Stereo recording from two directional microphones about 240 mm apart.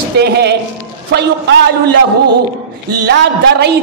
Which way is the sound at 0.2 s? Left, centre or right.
Right.